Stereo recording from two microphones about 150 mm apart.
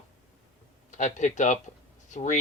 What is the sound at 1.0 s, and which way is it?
Speech, 55° left (ahead or behind).